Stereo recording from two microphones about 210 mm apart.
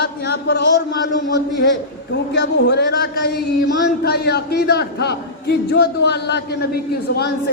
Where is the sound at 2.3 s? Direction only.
50° left (ahead or behind).